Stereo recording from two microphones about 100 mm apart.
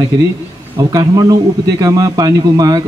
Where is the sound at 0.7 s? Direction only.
40° right (ahead or behind).